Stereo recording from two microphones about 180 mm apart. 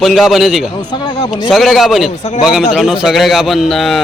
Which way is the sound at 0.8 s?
25° left (ahead or behind).